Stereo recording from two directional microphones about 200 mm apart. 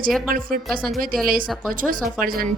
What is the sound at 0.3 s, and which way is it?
Speech, 45° right (ahead or behind).